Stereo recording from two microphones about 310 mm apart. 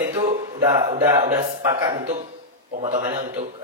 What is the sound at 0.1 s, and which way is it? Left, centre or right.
Speech, centre.